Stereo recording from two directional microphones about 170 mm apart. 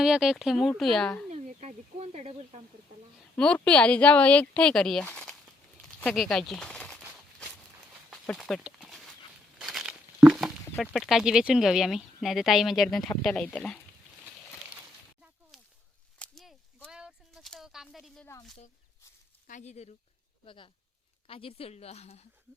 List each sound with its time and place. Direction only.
0.0 s speech: 5° right (ahead or behind)
1.3 s speech: 40° right (ahead or behind)
3.3 s speech: 5° left (ahead or behind)
8.1 s a sound: 5° left (ahead or behind)
9.6 s tearing: 5° right (ahead or behind)
10.2 s a sound: 5° right (ahead or behind)
10.8 s speech: centre (ahead or behind)
15.5 s a sound: centre (ahead or behind)
19.5 s speech: 45° left (ahead or behind)
20.4 s a woman's voice: 30° left (ahead or behind)